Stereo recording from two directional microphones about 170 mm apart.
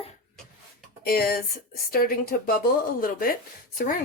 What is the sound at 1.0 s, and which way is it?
A woman's voice, 65° left (ahead or behind).